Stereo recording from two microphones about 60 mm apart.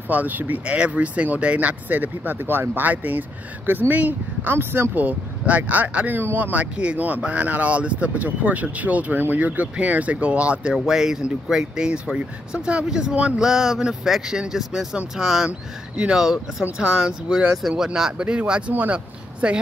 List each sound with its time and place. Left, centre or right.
0.1 s speech: right